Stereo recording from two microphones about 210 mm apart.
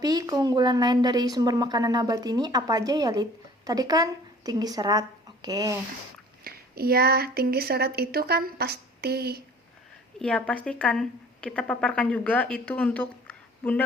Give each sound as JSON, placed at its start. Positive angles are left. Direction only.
{"t": 0.0, "sound": "a woman's voice", "side_deg": -15}
{"t": 6.4, "sound": "speech", "side_deg": -45}
{"t": 10.2, "sound": "a woman's voice", "side_deg": 5}